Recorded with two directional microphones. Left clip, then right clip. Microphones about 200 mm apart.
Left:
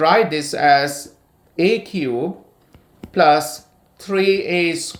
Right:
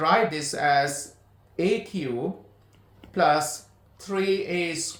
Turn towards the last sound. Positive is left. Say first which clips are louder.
# left 9 dB
turn(degrees=40)  # may be behind; listen again after turning